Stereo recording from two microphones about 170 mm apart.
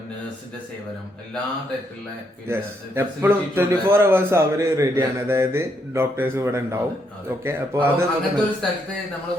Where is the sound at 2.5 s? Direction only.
15° right (ahead or behind).